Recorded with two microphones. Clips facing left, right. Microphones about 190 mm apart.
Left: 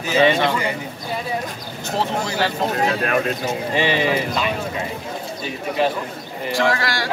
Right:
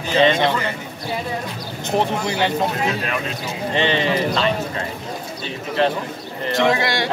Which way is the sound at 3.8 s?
5° left (ahead or behind).